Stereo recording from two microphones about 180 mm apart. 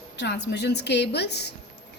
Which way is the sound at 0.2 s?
70° left (ahead or behind).